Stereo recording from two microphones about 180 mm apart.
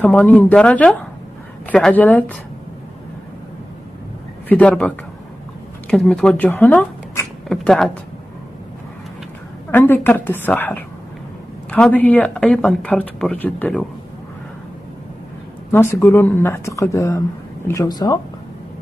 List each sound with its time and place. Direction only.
0.0 s speech: 10° left (ahead or behind)
4.5 s speech: 10° left (ahead or behind)
9.7 s speech: 10° left (ahead or behind)
15.7 s speech: 15° left (ahead or behind)